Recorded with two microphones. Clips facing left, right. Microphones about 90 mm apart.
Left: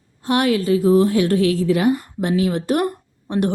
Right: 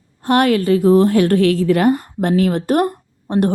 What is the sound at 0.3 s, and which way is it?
A woman's voice, 55° right (ahead or behind).